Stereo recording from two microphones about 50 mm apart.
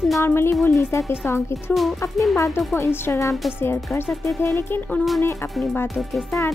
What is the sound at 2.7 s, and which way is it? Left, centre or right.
Speech, left.